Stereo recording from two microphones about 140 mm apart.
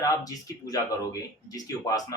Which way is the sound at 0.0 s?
25° left (ahead or behind).